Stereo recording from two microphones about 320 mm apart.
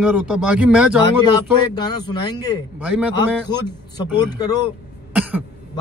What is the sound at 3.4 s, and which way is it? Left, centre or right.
A man's voice, centre.